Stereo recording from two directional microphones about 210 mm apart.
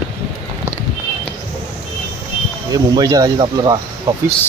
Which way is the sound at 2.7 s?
20° right (ahead or behind).